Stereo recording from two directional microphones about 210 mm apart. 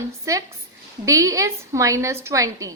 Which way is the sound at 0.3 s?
15° right (ahead or behind).